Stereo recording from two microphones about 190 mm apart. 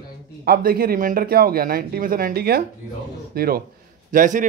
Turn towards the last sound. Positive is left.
turn(degrees=-45)  # may be behind; listen again after turning